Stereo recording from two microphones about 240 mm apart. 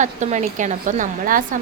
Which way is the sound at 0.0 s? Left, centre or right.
Right.